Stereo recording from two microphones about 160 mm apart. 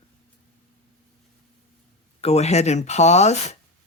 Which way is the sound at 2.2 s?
40° left (ahead or behind).